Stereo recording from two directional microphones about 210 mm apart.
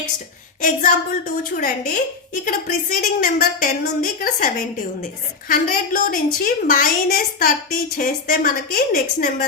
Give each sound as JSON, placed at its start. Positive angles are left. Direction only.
{"t": 0.6, "sound": "a woman's voice", "side_deg": 40}